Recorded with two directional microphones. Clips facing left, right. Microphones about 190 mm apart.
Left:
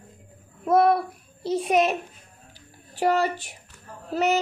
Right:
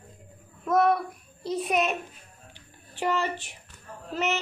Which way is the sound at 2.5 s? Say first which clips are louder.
Left 2 dB; 40° left (ahead or behind).